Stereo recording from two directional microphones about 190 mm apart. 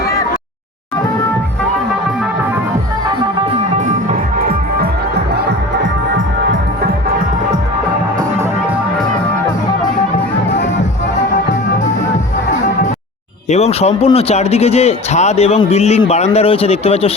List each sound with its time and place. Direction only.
4.1 s music: 50° right (ahead or behind)
5.1 s music: 60° right (ahead or behind)
13.5 s a man's voice: 35° left (ahead or behind)